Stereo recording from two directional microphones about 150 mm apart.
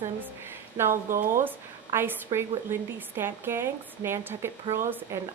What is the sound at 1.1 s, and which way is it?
Speech, 65° right (ahead or behind).